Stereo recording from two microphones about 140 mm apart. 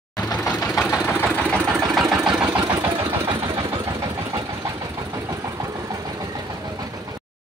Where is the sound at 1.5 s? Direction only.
20° right (ahead or behind).